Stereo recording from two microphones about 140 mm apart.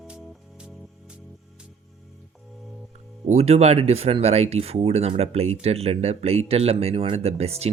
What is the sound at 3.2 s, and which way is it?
Speech, 50° right (ahead or behind).